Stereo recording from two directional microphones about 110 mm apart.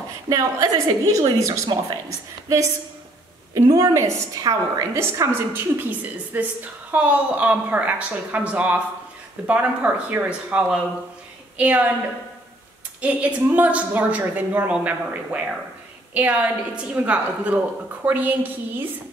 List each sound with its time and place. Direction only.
0.3 s a woman's voice: 35° right (ahead or behind); by 11.9 s 10° right (ahead or behind)
13.0 s a woman's voice: 15° right (ahead or behind)